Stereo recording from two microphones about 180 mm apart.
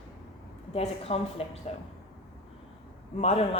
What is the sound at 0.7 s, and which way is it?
Speech, 35° left (ahead or behind).